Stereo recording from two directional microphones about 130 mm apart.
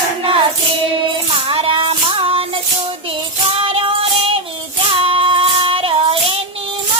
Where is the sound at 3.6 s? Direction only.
45° right (ahead or behind).